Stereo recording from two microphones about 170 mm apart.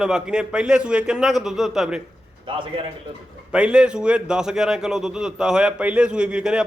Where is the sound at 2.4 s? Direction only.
30° right (ahead or behind).